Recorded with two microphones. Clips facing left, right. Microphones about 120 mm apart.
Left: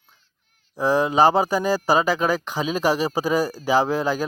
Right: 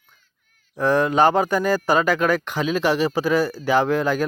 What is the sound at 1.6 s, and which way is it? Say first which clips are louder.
Speech: right 1 dB; 35° left (ahead or behind).